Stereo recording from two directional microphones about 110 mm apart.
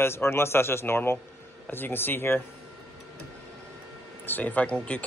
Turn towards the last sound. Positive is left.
turn(degrees=10)  # may be behind; listen again after turning